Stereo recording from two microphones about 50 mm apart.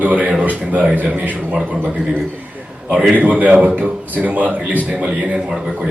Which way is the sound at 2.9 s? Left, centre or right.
Right.